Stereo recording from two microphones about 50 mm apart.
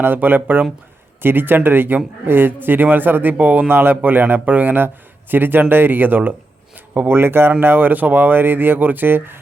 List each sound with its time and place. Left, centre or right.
0.0 s speech: right